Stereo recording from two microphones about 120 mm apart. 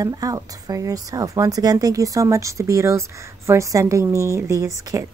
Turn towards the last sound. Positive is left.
turn(degrees=-30)  # may be behind; listen again after turning